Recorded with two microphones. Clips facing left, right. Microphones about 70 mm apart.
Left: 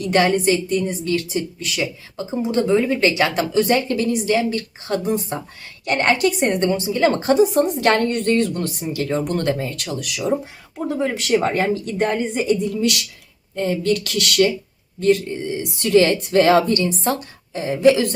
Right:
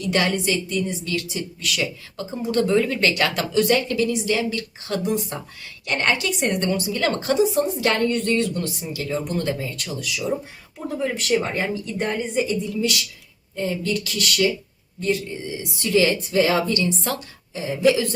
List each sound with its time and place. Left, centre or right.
0.0 s a woman's voice: left
7.5 s a woman's voice: left
9.2 s speech: left
10.8 s speech: left
11.4 s speech: left
12.5 s a woman's voice: left